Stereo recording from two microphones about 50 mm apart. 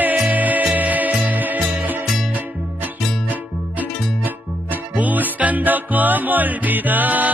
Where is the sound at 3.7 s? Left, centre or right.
Right.